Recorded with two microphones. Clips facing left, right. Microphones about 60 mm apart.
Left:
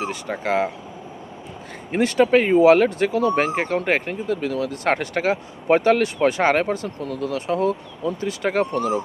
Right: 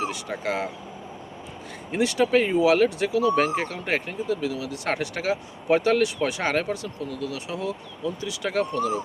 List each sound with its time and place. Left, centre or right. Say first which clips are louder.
0.0 s speech: left 2 dB; left
1.9 s speech: left 4 dB; left